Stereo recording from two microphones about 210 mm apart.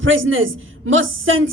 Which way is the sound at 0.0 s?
65° right (ahead or behind).